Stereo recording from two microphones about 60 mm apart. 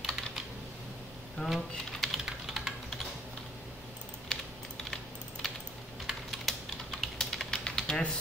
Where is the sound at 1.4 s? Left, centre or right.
Centre.